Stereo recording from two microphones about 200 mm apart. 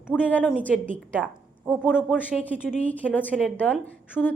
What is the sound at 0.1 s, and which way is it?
A woman's voice, 10° left (ahead or behind).